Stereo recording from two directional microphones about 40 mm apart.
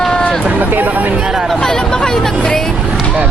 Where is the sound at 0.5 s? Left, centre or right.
Right.